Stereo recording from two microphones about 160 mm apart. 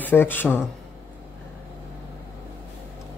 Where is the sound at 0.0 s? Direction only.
10° left (ahead or behind).